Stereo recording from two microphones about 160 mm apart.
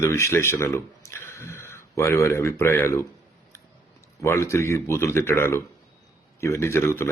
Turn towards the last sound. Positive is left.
turn(degrees=15)  # may be behind; listen again after turning